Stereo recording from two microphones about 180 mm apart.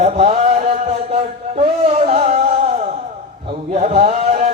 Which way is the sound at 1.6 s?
35° right (ahead or behind).